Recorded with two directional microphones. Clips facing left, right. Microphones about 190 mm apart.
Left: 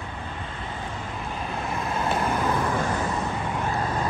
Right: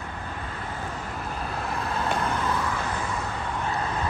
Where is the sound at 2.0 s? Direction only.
10° left (ahead or behind).